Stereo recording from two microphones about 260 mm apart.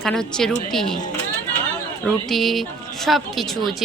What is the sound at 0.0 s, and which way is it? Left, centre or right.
Speech, centre.